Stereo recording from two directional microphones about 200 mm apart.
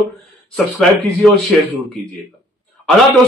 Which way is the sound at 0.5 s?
Centre (ahead or behind).